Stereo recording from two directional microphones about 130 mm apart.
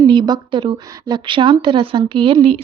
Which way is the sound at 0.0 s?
35° right (ahead or behind).